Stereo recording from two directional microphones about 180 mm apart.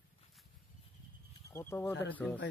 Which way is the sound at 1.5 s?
15° left (ahead or behind).